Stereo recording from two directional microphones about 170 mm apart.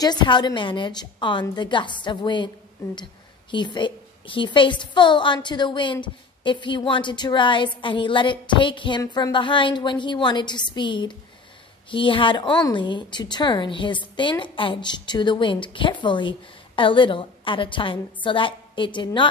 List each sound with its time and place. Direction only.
0.0 s a woman's voice: 25° left (ahead or behind)